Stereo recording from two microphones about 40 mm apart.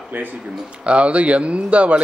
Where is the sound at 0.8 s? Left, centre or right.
Right.